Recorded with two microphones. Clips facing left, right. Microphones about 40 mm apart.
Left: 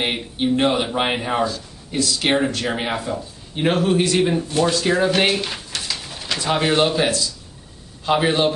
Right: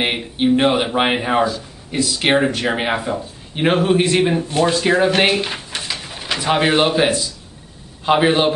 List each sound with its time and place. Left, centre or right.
0.0 s speech: centre